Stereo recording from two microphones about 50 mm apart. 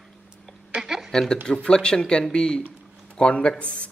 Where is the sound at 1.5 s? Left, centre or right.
Centre.